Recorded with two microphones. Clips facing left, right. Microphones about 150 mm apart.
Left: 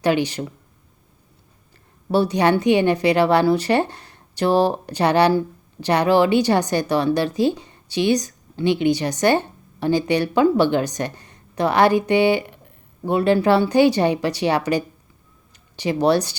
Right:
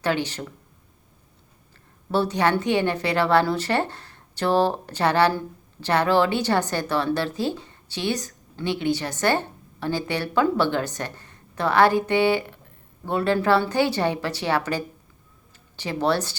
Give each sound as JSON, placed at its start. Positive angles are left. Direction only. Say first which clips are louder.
{"t": 0.0, "sound": "a woman's voice", "louder": "left 5 dB", "side_deg": 15}
{"t": 2.1, "sound": "a woman's voice", "louder": "left 4 dB", "side_deg": 15}